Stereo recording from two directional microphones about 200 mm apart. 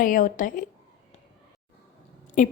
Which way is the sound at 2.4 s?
40° left (ahead or behind).